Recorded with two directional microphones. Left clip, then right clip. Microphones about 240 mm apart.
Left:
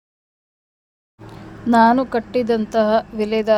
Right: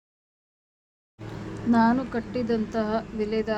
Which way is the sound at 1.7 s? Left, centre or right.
Left.